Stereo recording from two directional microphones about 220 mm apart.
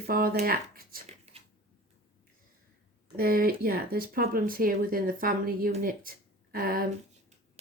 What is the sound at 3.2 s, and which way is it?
Speech, 45° right (ahead or behind).